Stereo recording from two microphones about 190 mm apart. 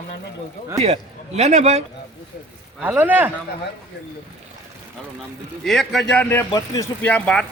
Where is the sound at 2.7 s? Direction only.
10° right (ahead or behind).